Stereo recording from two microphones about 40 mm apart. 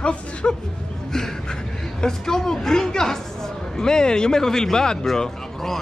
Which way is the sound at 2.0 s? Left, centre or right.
Centre.